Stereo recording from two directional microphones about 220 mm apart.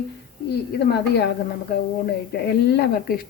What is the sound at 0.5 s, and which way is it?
Speech, 50° left (ahead or behind).